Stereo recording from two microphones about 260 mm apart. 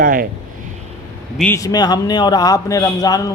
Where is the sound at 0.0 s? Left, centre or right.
Right.